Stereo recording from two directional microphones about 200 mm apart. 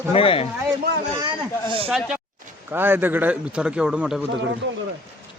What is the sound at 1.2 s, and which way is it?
Speech, 25° right (ahead or behind).